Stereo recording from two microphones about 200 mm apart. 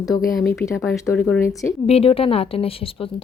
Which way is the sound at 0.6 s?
15° left (ahead or behind).